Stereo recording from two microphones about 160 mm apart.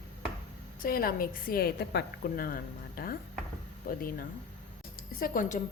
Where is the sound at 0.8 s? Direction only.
65° left (ahead or behind).